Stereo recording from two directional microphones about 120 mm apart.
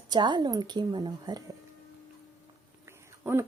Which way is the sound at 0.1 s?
40° right (ahead or behind).